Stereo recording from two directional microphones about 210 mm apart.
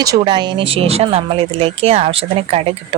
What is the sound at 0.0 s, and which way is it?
Speech, 20° right (ahead or behind).